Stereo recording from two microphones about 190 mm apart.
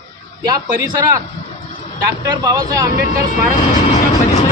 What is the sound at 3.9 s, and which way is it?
Vehicle, 35° left (ahead or behind).